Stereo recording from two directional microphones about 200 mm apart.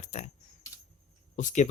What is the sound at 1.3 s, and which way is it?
Speech, 40° left (ahead or behind).